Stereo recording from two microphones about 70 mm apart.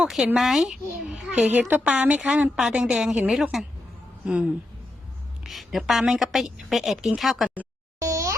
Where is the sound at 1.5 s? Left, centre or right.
Right.